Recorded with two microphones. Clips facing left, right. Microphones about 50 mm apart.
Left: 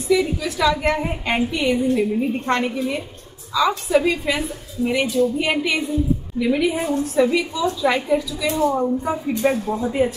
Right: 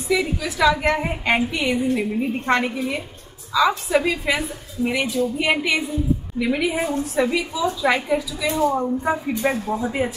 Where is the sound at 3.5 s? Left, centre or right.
Centre.